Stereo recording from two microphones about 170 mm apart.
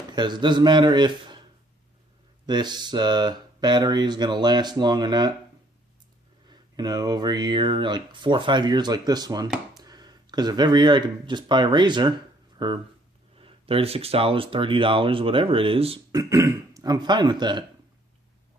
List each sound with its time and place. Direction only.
0.1 s speech: 25° right (ahead or behind)
2.5 s speech: 25° right (ahead or behind)
6.5 s speech: 25° right (ahead or behind)
16.1 s speech: 20° right (ahead or behind)